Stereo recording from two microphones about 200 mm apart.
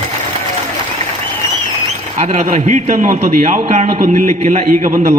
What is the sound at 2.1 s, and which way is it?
A man's voice, 35° right (ahead or behind).